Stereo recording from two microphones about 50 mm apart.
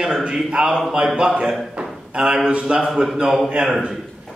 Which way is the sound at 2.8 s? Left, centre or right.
Centre.